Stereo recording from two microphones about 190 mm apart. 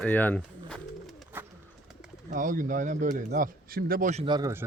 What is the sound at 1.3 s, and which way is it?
Bird, 10° right (ahead or behind).